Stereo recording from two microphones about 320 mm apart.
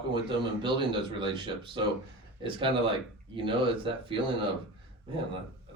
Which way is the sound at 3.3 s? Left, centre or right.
Centre.